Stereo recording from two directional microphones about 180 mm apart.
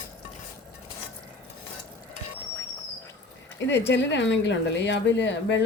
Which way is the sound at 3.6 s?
75° left (ahead or behind).